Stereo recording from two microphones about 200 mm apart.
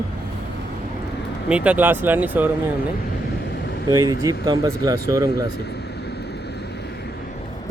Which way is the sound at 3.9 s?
15° right (ahead or behind).